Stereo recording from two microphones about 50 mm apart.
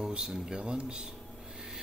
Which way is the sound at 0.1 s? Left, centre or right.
Centre.